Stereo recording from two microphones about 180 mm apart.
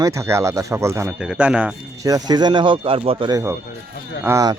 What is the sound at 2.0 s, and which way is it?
Speech, 20° right (ahead or behind).